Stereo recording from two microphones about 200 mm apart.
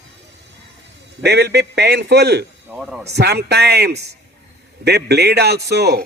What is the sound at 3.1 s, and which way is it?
A man's voice, 55° right (ahead or behind).